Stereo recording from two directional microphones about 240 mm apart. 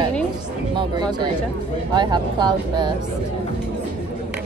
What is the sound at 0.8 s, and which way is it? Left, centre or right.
Speech, centre.